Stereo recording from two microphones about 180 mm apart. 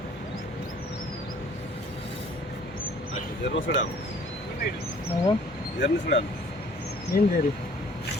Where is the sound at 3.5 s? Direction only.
90° left.